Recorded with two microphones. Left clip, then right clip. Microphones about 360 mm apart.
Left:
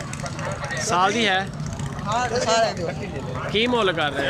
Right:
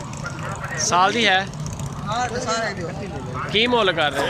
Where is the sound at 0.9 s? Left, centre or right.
Centre.